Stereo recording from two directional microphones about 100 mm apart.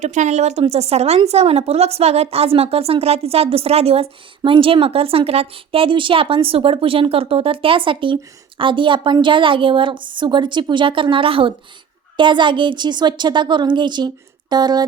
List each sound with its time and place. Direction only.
0.6 s a woman's voice: 90° right; by 11.5 s 65° right (ahead or behind)
12.1 s speech: 55° right (ahead or behind)